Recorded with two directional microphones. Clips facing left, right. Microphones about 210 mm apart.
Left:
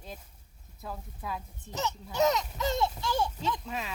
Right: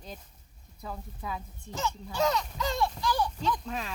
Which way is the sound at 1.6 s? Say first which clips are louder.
Even; 20° left (ahead or behind).